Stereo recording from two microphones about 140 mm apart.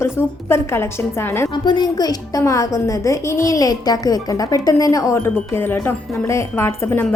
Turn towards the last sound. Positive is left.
turn(degrees=15)  # may be behind; listen again after turning